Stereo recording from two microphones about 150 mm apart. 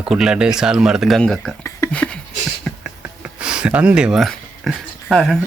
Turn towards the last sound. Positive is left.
turn(degrees=0)  # may be behind; listen again after turning